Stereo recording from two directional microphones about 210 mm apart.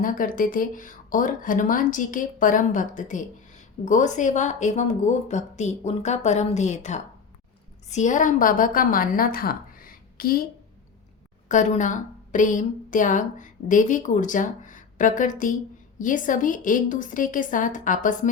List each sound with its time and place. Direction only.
0.0 s a woman's voice: 40° left (ahead or behind)
11.4 s a woman's voice: 35° left (ahead or behind)